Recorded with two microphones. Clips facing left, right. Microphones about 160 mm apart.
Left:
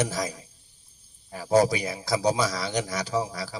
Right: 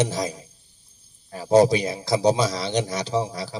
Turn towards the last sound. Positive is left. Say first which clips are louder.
# right 3 dB
turn(degrees=-25)  # may be behind; listen again after turning